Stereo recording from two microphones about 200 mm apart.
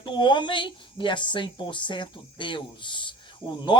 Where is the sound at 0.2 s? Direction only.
25° left (ahead or behind).